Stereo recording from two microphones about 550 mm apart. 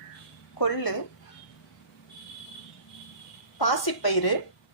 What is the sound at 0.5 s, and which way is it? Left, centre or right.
Speech, left.